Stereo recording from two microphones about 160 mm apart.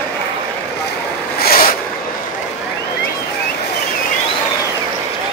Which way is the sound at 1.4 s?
70° left (ahead or behind).